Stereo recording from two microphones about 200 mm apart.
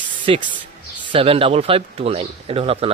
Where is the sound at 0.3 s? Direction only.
30° right (ahead or behind).